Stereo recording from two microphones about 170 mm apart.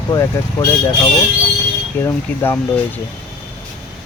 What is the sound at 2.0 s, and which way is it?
Speech, 15° left (ahead or behind).